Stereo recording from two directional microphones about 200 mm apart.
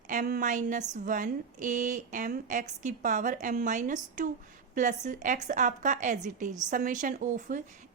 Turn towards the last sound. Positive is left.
turn(degrees=-40)  # may be behind; listen again after turning